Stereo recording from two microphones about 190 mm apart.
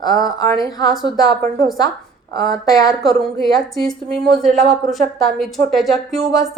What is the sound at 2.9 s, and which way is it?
Speech, centre (ahead or behind).